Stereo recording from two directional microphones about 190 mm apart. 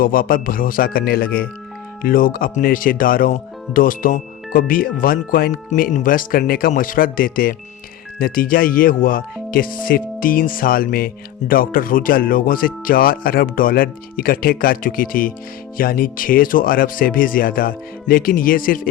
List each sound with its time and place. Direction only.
0.0 s speech: 50° left (ahead or behind)